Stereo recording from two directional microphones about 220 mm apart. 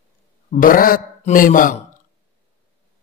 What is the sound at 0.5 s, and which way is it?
Speech, 40° left (ahead or behind).